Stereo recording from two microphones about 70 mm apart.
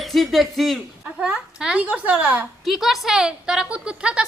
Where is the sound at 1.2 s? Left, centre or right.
Centre.